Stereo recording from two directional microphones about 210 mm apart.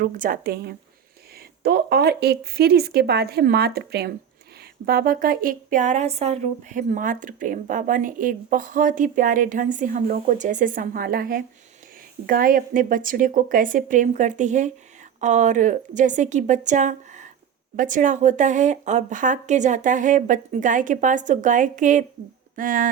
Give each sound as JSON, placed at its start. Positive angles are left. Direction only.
{"t": 0.0, "sound": "speech", "side_deg": -40}